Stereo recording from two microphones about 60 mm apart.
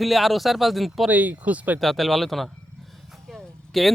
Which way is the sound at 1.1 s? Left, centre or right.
Right.